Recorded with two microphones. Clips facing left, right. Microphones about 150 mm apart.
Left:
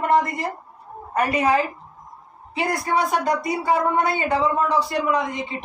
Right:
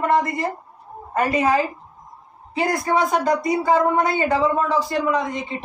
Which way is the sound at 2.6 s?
45° right (ahead or behind).